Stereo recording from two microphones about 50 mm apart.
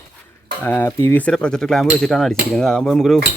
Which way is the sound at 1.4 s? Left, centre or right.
Centre.